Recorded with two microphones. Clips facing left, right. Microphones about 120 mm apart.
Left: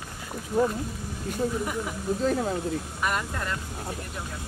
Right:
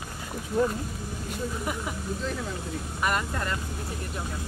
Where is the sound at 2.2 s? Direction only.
45° left (ahead or behind).